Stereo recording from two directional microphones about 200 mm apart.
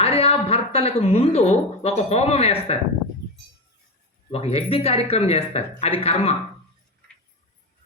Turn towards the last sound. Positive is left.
turn(degrees=30)  # may be behind; listen again after turning